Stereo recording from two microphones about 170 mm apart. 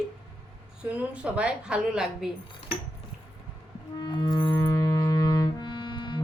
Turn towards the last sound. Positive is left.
turn(degrees=25)  # may be behind; listen again after turning